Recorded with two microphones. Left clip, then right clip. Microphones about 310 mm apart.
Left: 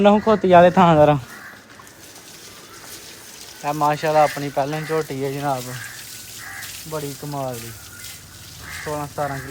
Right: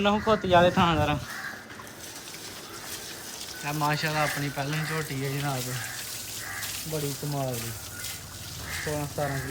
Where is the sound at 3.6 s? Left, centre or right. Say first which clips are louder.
Left 8 dB; centre.